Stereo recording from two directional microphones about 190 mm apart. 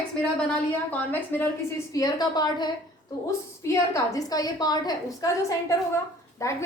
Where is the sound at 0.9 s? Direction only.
10° left (ahead or behind).